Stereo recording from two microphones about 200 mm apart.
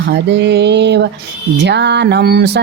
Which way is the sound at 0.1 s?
60° right (ahead or behind).